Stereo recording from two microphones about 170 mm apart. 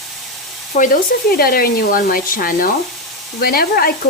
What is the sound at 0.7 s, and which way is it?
Speech, 60° left (ahead or behind).